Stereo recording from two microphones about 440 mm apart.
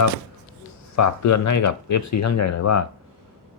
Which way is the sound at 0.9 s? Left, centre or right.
Left.